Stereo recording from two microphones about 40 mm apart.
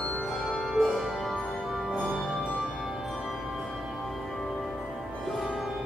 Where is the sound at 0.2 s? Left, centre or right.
Centre.